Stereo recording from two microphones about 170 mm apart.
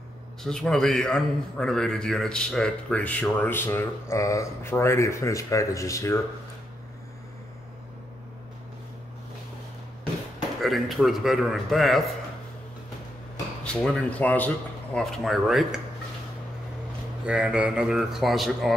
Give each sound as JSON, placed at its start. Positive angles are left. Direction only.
{"t": 0.4, "sound": "a man's voice", "side_deg": 0}
{"t": 10.6, "sound": "speech", "side_deg": 0}
{"t": 13.8, "sound": "a man's voice", "side_deg": 5}
{"t": 17.3, "sound": "speech", "side_deg": -5}